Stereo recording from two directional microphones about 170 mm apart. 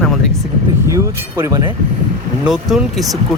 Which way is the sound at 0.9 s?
20° right (ahead or behind).